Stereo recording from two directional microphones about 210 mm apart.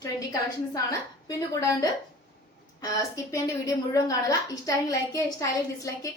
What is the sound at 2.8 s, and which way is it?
A woman's voice, 15° left (ahead or behind).